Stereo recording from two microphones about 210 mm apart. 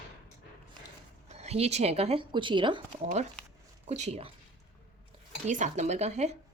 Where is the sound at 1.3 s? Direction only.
30° right (ahead or behind).